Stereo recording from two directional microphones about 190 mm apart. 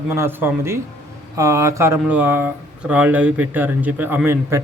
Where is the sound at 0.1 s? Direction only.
10° right (ahead or behind).